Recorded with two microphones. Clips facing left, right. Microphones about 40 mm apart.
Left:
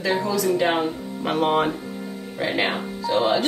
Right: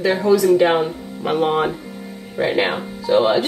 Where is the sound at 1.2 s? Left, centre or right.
Centre.